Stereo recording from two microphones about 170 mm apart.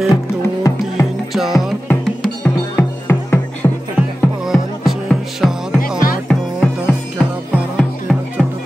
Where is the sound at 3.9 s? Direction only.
5° right (ahead or behind).